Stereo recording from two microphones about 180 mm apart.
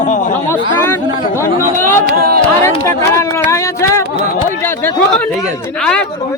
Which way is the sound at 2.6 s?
15° left (ahead or behind).